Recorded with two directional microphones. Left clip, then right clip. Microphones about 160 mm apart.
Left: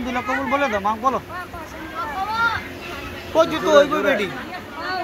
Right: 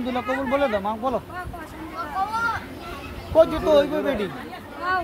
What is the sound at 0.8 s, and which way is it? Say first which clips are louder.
Speech: left 5 dB; 20° right (ahead or behind).